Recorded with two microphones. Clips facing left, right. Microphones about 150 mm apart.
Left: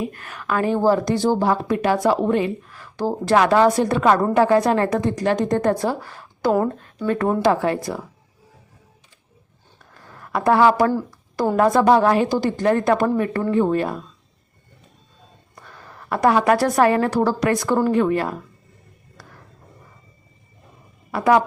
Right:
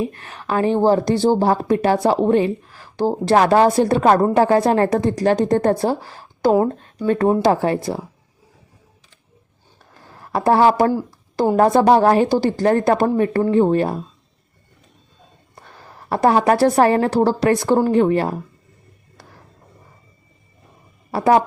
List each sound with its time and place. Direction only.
0.0 s a woman's voice: 30° right (ahead or behind)
10.2 s a woman's voice: 30° right (ahead or behind)
15.5 s a woman's voice: 30° right (ahead or behind)
21.1 s speech: 30° right (ahead or behind)